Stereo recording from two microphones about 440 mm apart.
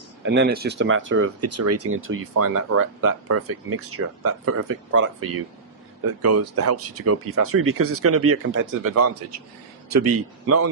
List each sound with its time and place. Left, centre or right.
0.2 s speech: right